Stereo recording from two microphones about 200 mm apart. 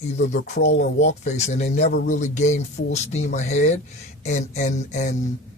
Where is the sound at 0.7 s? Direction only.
60° left (ahead or behind).